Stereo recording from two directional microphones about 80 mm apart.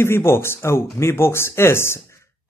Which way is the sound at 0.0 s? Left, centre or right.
Left.